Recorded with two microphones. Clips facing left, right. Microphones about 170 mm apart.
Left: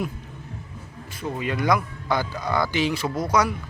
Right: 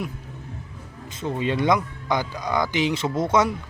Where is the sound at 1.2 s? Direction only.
25° right (ahead or behind).